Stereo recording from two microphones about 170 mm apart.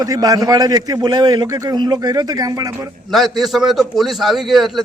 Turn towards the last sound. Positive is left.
turn(degrees=0)  # may be behind; listen again after turning